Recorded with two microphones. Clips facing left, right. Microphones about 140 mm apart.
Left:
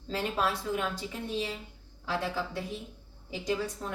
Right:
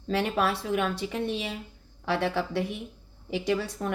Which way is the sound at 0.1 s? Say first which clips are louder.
Right 4 dB; 70° right (ahead or behind).